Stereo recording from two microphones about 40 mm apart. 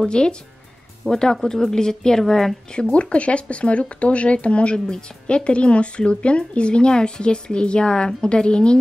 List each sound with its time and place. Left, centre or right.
0.1 s speech: left
2.7 s speech: left
4.7 s speech: centre